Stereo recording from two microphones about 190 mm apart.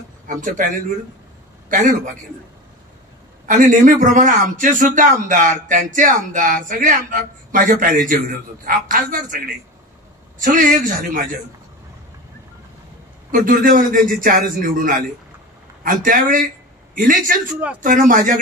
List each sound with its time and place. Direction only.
0.3 s speech: 45° right (ahead or behind)
3.4 s speech: 45° right (ahead or behind)
10.4 s speech: 45° right (ahead or behind)
13.3 s speech: 45° right (ahead or behind)